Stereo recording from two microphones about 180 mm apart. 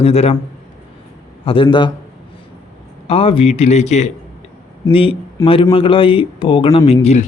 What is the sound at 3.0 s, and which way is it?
Speech, 30° left (ahead or behind).